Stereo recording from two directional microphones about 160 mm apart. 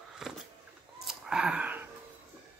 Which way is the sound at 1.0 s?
5° right (ahead or behind).